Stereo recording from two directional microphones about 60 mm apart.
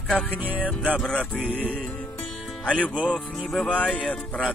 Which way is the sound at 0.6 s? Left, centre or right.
Left.